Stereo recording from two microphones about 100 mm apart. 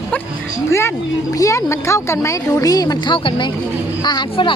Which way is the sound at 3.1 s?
55° left (ahead or behind).